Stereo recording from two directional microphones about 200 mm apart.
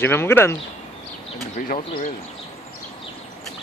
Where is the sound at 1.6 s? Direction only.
45° left (ahead or behind).